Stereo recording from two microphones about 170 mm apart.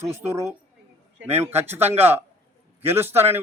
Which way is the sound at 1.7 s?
40° right (ahead or behind).